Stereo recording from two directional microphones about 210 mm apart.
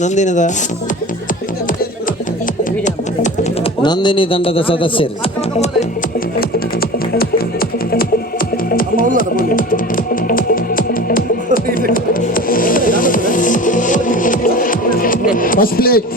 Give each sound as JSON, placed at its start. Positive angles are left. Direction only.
{"t": 0.0, "sound": "speech", "side_deg": 35}
{"t": 3.6, "sound": "speech", "side_deg": 20}
{"t": 7.1, "sound": "music", "side_deg": 45}
{"t": 8.7, "sound": "music", "side_deg": 40}